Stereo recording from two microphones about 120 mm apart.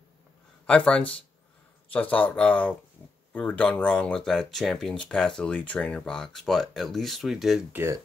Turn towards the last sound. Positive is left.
turn(degrees=-20)  # may be behind; listen again after turning